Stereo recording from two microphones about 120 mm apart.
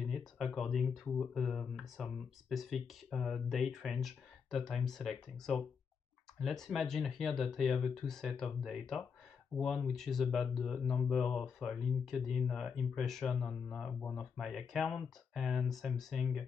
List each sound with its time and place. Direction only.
0.0 s speech: centre (ahead or behind)
1.0 s speech: 15° left (ahead or behind)
1.3 s speech: centre (ahead or behind)